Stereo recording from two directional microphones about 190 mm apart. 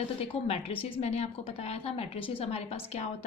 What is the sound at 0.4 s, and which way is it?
A woman's voice, 30° left (ahead or behind).